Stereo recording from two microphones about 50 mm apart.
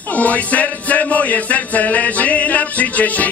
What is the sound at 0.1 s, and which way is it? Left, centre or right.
Music, left.